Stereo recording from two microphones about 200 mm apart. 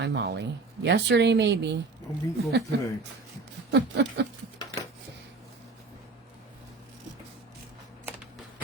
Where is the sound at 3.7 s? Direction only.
60° right (ahead or behind).